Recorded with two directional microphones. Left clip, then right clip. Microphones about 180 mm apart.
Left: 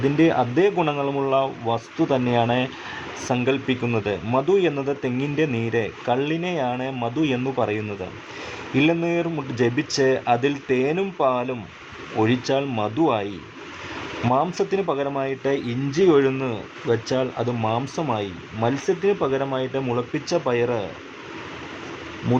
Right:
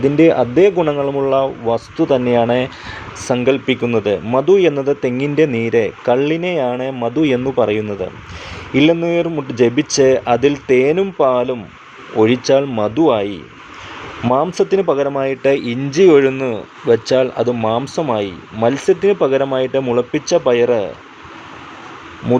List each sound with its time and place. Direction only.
0.0 s speech: 25° right (ahead or behind)